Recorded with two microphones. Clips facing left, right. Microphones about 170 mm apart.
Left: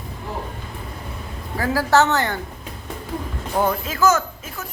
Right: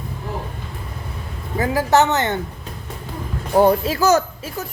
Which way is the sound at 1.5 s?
20° right (ahead or behind).